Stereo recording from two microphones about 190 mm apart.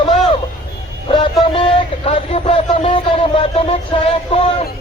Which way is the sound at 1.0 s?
30° left (ahead or behind).